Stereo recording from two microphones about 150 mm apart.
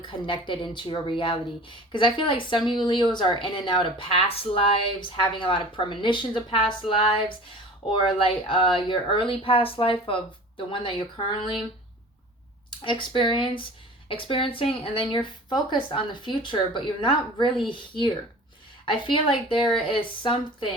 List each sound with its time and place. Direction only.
0.0 s speech: 30° left (ahead or behind)
12.8 s speech: 35° left (ahead or behind)